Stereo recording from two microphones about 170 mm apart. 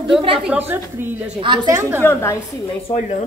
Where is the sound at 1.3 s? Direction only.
25° right (ahead or behind).